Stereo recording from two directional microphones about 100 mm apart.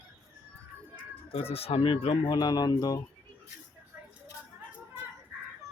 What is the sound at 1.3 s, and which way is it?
Speech, 75° left (ahead or behind).